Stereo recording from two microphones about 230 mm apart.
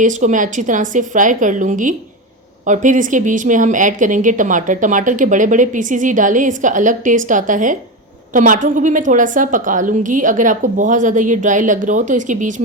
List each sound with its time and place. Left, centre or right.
0.0 s speech: right